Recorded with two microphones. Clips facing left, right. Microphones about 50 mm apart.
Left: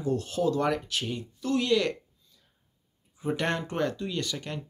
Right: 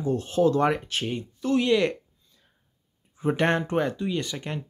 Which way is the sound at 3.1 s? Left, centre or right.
Right.